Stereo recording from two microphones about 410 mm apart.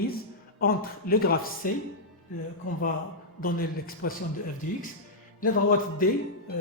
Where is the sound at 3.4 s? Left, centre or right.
Left.